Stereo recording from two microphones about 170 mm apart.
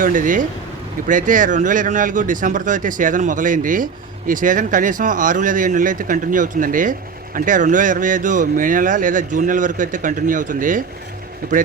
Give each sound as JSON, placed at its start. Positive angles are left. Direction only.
{"t": 0.0, "sound": "speech", "side_deg": -50}